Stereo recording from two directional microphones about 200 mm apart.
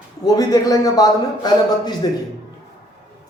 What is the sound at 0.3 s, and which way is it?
Speech, 20° left (ahead or behind).